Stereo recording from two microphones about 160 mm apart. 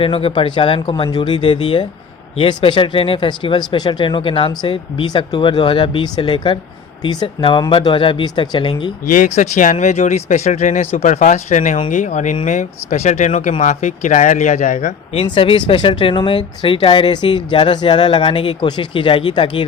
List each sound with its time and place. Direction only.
0.0 s speech: 35° left (ahead or behind)
9.0 s speech: 50° left (ahead or behind); by 19.6 s 30° left (ahead or behind)